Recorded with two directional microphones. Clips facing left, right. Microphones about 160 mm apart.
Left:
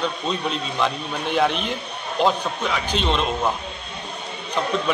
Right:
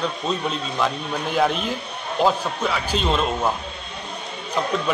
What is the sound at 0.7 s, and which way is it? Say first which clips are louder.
A man's voice: right 1 dB; 5° right (ahead or behind).